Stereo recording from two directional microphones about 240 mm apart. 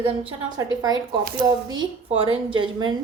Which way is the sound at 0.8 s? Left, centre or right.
Centre.